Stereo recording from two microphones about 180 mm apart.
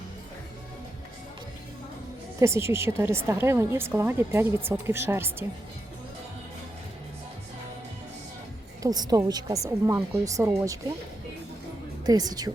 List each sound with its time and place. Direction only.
2.4 s a woman's voice: 15° right (ahead or behind)
8.8 s a woman's voice: 20° right (ahead or behind)
12.0 s a woman's voice: 20° right (ahead or behind)